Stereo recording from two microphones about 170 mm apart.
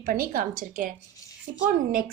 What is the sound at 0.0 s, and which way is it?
Speech, 55° right (ahead or behind).